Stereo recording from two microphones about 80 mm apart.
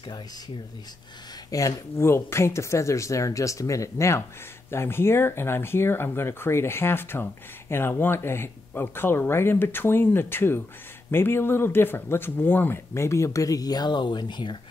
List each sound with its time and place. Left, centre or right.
1.5 s speech: left